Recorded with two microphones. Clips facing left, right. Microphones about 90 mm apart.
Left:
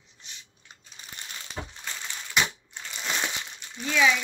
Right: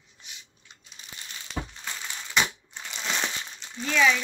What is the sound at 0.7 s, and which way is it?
Crumpling, 45° left (ahead or behind).